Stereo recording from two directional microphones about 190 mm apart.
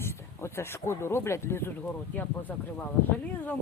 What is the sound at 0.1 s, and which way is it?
Speech, 15° left (ahead or behind).